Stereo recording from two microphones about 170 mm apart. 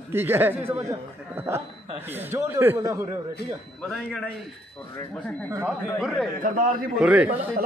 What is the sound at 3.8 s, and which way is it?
A man's voice, 5° left (ahead or behind).